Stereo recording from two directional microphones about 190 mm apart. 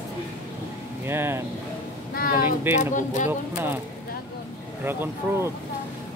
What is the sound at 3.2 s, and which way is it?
Speech, 10° right (ahead or behind).